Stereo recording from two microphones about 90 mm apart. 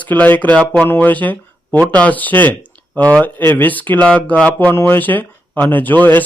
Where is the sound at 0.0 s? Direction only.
20° left (ahead or behind).